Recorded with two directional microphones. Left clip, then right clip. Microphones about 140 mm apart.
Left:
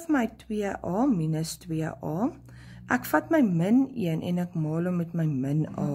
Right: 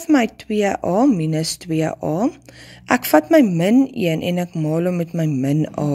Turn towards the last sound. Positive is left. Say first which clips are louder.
# right 10 dB
turn(degrees=-30)  # may be behind; listen again after turning